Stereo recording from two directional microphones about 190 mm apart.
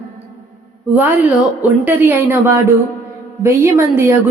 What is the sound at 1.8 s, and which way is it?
A woman's voice, 10° right (ahead or behind).